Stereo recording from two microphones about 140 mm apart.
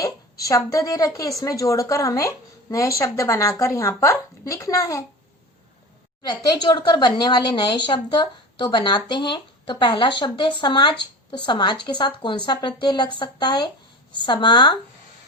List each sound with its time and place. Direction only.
0.0 s a woman's voice: 25° left (ahead or behind)
6.2 s speech: 30° left (ahead or behind)